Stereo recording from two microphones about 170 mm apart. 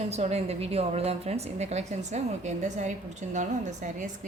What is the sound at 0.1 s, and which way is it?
A woman's voice, 40° right (ahead or behind).